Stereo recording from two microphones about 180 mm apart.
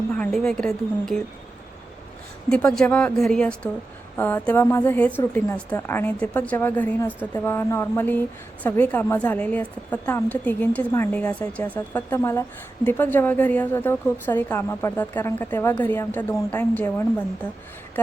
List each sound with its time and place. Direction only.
0.1 s a woman's voice: 5° left (ahead or behind)
2.5 s a woman's voice: 5° left (ahead or behind)